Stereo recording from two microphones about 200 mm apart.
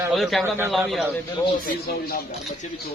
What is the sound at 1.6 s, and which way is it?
Speech, 50° left (ahead or behind).